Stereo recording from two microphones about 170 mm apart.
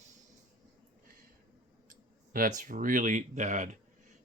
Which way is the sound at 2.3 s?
50° right (ahead or behind).